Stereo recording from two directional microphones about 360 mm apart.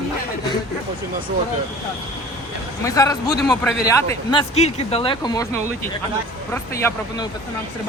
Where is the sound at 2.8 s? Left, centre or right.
Centre.